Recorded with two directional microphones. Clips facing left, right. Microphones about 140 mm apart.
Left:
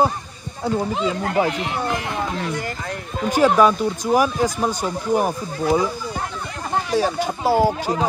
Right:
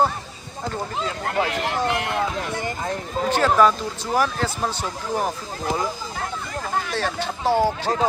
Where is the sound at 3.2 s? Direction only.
10° left (ahead or behind).